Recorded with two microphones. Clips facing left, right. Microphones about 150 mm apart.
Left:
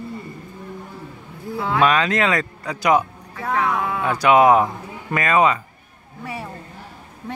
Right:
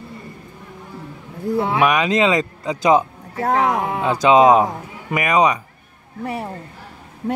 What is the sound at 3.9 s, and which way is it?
A man's voice, 20° right (ahead or behind).